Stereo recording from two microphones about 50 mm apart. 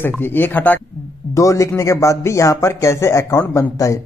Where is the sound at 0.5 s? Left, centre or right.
Left.